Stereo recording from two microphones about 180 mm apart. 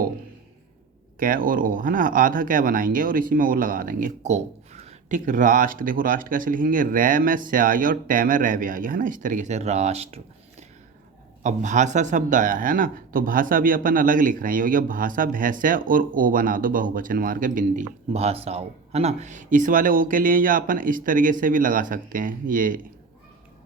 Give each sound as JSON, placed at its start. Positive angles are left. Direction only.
{"t": 1.2, "sound": "speech", "side_deg": -50}
{"t": 11.4, "sound": "speech", "side_deg": -40}